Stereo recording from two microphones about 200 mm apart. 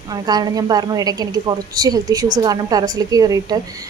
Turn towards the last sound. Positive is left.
turn(degrees=-20)  # may be behind; listen again after turning